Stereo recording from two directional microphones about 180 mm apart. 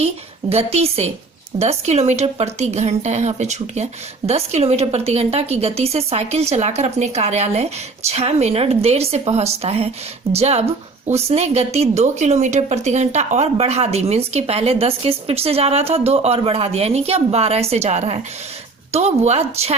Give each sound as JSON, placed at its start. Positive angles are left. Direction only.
{"t": 0.5, "sound": "a woman's voice", "side_deg": -35}